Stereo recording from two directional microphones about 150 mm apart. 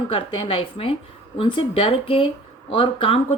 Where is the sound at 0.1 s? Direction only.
35° left (ahead or behind).